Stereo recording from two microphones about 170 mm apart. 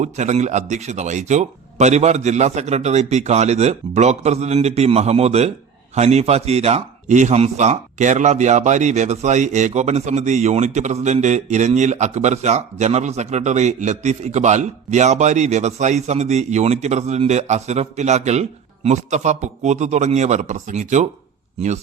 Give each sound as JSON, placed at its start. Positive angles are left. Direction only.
{"t": 0.0, "sound": "a man's voice", "side_deg": -45}